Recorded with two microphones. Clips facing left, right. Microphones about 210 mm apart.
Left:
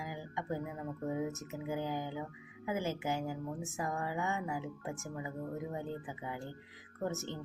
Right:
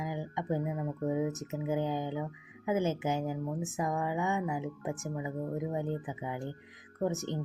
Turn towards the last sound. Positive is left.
turn(degrees=-15)  # may be behind; listen again after turning